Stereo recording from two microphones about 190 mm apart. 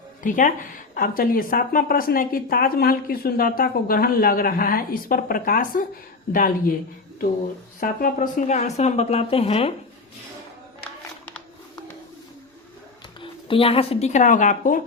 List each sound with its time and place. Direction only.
0.2 s speech: 45° left (ahead or behind)
7.8 s speech: 45° left (ahead or behind)
13.2 s speech: 30° left (ahead or behind); by 14.8 s 45° left (ahead or behind)